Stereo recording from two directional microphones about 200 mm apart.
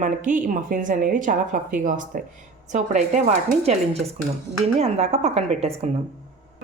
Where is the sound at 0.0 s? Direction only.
40° right (ahead or behind).